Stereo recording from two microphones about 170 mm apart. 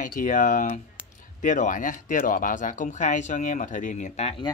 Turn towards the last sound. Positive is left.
turn(degrees=45)  # may be behind; listen again after turning